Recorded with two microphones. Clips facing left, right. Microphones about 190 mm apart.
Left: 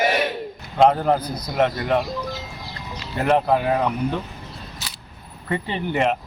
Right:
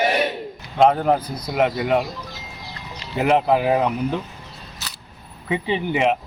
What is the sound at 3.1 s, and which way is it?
Speech, 10° right (ahead or behind).